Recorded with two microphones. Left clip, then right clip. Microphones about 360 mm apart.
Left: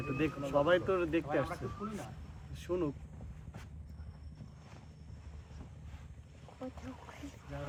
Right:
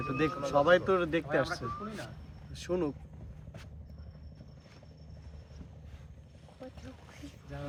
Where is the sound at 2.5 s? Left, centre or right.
Right.